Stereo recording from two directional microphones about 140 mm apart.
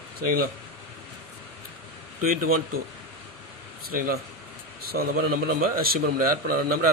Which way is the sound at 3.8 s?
90° right.